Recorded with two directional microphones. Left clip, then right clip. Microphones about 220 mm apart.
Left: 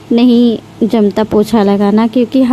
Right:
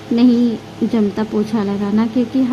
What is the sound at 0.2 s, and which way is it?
Speech, 40° left (ahead or behind).